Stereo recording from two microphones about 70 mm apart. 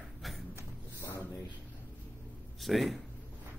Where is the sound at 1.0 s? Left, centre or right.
Left.